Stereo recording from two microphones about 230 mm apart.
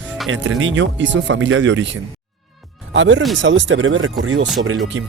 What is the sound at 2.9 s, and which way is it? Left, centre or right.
Speech, right.